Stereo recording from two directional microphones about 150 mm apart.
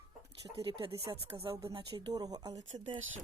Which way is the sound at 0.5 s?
35° right (ahead or behind).